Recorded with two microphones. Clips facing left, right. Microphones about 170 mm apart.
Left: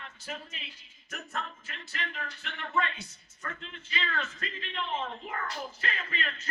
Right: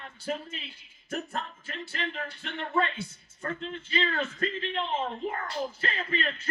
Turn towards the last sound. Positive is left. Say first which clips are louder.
# right 5 dB
turn(degrees=-30)  # may be behind; listen again after turning